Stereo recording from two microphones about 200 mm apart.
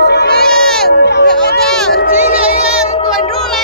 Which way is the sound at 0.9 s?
55° left (ahead or behind).